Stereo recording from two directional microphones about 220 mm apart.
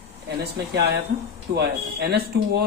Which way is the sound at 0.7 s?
50° right (ahead or behind).